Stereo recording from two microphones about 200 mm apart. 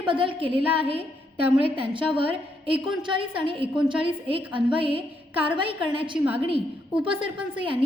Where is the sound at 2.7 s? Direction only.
25° right (ahead or behind).